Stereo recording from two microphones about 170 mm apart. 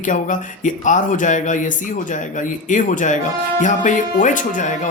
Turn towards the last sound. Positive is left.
turn(degrees=50)  # may be behind; listen again after turning